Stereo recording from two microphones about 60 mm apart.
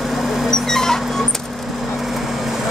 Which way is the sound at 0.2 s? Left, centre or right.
Centre.